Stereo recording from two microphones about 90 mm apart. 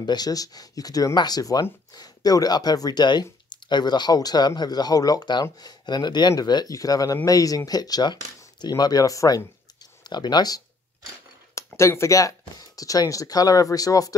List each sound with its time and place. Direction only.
0.0 s speech: 50° left (ahead or behind)
10.0 s speech: 55° left (ahead or behind)
11.5 s speech: 30° left (ahead or behind)